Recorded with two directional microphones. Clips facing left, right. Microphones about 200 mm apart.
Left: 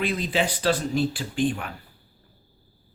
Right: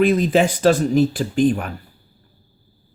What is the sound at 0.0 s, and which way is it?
Speech, 45° right (ahead or behind).